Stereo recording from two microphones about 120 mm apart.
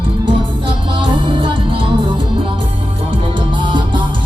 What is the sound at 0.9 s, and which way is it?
Music, 45° right (ahead or behind).